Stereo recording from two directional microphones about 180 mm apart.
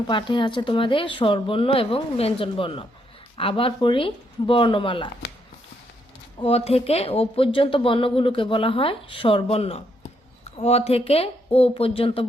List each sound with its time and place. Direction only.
0.1 s speech: 25° left (ahead or behind)
6.4 s speech: 35° left (ahead or behind)